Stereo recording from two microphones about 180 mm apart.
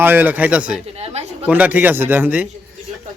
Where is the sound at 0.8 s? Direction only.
35° right (ahead or behind).